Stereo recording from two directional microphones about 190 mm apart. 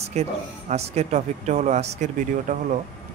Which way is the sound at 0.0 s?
35° right (ahead or behind).